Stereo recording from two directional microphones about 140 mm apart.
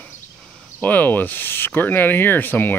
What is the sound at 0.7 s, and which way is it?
Speech, 10° left (ahead or behind).